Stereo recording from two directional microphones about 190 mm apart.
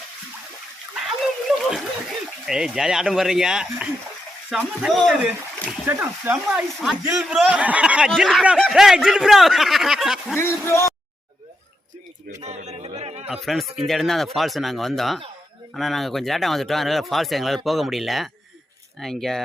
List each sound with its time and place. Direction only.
1.0 s a sound: centre (ahead or behind)
2.5 s speech: 5° right (ahead or behind)
10.3 s speech: 15° left (ahead or behind)
12.4 s speech: 35° right (ahead or behind)
13.2 s speech: centre (ahead or behind)